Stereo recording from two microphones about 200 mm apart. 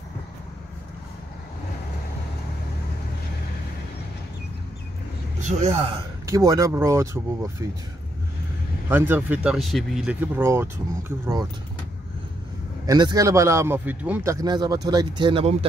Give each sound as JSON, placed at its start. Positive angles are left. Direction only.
{"t": 5.4, "sound": "a man's voice", "side_deg": -35}
{"t": 6.3, "sound": "speech", "side_deg": -15}
{"t": 8.8, "sound": "speech", "side_deg": -10}
{"t": 12.8, "sound": "speech", "side_deg": -20}